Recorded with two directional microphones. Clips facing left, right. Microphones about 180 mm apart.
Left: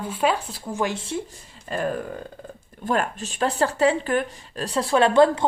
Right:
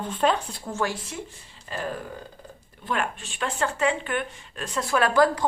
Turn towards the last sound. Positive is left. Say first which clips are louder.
# left 4 dB
turn(degrees=25)  # may be behind; listen again after turning